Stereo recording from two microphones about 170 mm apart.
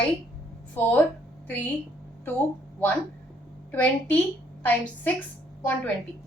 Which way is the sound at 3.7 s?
10° left (ahead or behind).